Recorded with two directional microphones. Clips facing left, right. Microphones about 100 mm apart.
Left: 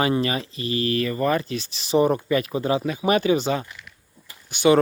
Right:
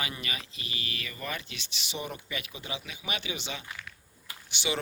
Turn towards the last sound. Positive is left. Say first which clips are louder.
# left 16 dB
turn(degrees=45)  # may be behind; listen again after turning